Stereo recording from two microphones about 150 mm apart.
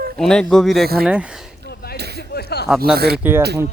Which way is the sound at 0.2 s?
5° left (ahead or behind).